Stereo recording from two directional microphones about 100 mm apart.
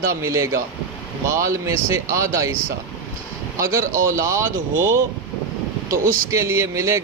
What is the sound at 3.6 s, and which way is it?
A man's voice, 30° right (ahead or behind).